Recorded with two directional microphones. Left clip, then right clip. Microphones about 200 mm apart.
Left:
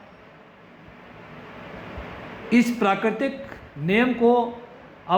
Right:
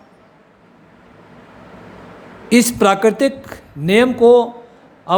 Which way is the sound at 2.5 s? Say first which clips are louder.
Right 8 dB; 65° right (ahead or behind).